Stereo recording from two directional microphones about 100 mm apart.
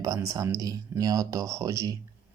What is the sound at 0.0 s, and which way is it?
Speech, 35° right (ahead or behind).